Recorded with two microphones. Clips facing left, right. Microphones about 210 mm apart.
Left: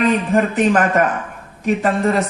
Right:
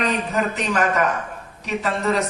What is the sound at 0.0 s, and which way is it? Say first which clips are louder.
Speech: left 6 dB; 50° left (ahead or behind).